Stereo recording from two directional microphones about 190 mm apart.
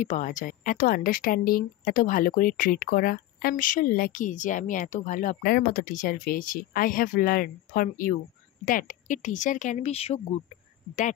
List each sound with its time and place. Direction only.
0.0 s a woman's voice: 40° left (ahead or behind)